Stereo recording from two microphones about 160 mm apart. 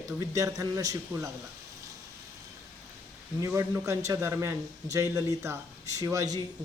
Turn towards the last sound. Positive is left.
turn(degrees=-20)  # may be behind; listen again after turning